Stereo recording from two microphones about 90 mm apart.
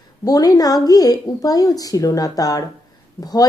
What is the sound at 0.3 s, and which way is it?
A woman's voice, 45° left (ahead or behind).